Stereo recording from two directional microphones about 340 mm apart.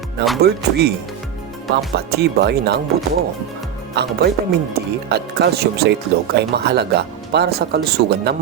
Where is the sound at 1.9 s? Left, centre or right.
Right.